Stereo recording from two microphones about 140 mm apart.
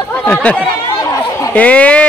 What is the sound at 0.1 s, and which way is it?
Chatter, 10° left (ahead or behind).